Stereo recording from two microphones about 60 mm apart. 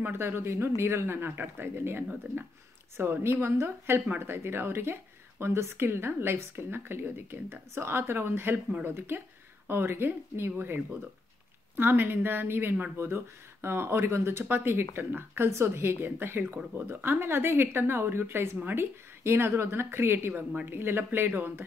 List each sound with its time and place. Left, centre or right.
0.1 s speech: right
12.9 s speech: right